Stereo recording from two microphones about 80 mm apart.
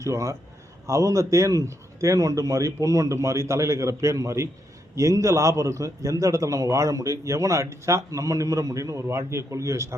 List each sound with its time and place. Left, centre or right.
0.0 s a man's voice: right